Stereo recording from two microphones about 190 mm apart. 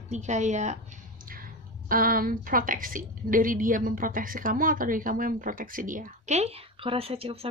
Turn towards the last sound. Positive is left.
turn(degrees=-30)  # may be behind; listen again after turning